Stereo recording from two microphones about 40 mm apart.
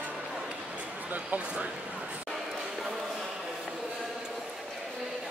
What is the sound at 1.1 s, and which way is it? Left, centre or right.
Speech, right.